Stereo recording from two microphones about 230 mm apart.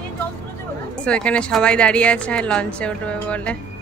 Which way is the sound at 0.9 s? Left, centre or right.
Centre.